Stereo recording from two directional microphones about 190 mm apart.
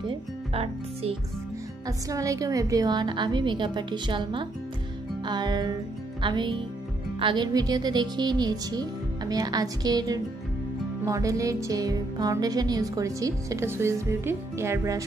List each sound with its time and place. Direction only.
0.1 s speech: 30° right (ahead or behind)
1.9 s speech: 15° right (ahead or behind)